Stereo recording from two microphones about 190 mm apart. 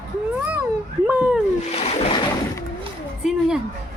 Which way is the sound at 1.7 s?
30° left (ahead or behind).